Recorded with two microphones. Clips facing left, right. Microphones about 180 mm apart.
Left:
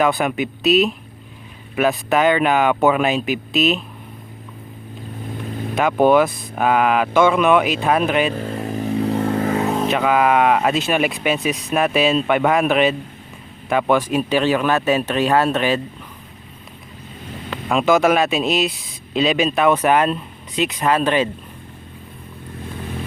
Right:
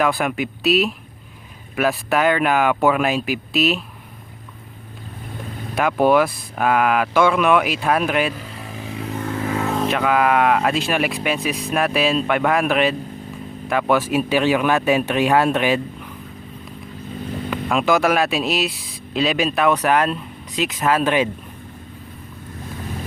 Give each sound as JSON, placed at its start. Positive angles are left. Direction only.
{"t": 0.0, "sound": "speech", "side_deg": 0}
{"t": 5.7, "sound": "speech", "side_deg": -5}
{"t": 8.4, "sound": "motorcycle", "side_deg": 45}
{"t": 9.2, "sound": "vehicle", "side_deg": 45}
{"t": 9.6, "sound": "vehicle", "side_deg": 15}
{"t": 9.8, "sound": "speech", "side_deg": 0}
{"t": 17.5, "sound": "speech", "side_deg": 0}